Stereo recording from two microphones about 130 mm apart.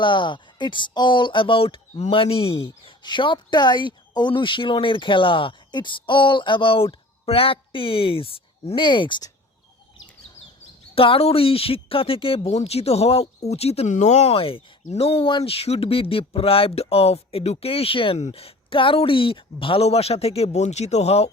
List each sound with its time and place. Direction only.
0.0 s speech: 40° left (ahead or behind)
10.9 s speech: 45° left (ahead or behind)